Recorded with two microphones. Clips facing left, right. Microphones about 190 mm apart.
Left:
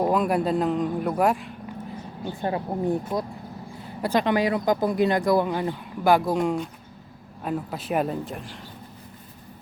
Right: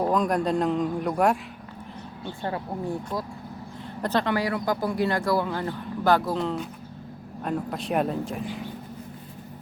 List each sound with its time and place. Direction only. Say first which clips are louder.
0.0 s a man's voice: left 1 dB; 5° left (ahead or behind)
2.4 s speech: left 4 dB; 20° left (ahead or behind)
7.4 s a man's voice: even; 5° left (ahead or behind)